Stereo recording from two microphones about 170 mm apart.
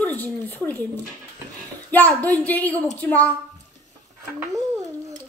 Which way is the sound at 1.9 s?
10° left (ahead or behind).